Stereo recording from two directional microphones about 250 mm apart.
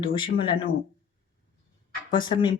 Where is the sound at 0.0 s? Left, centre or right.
Left.